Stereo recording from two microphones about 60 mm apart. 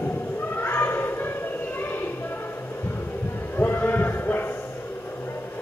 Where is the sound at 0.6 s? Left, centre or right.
Left.